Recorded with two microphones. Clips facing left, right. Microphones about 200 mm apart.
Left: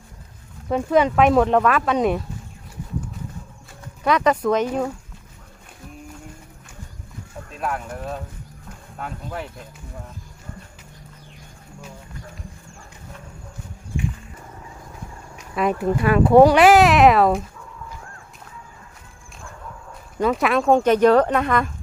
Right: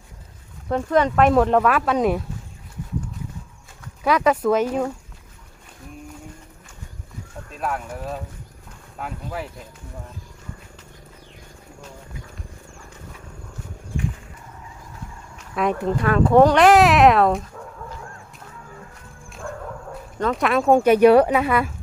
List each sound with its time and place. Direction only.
0.7 s speech: 5° left (ahead or behind)
4.0 s speech: 5° right (ahead or behind)
7.5 s speech: centre (ahead or behind)
15.5 s speech: 5° left (ahead or behind)
19.4 s bow-wow: 60° right (ahead or behind)
20.1 s speech: 5° left (ahead or behind)